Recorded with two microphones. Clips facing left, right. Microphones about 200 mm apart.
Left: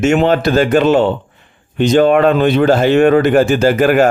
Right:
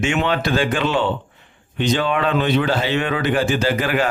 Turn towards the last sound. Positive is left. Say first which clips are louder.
# left 9 dB
turn(degrees=45)  # may be behind; listen again after turning